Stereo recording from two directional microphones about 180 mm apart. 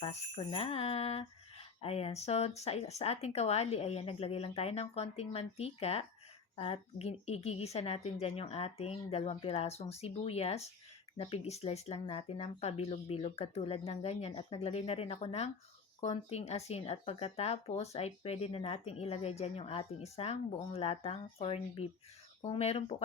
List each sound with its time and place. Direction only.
0.0 s speech: 30° left (ahead or behind)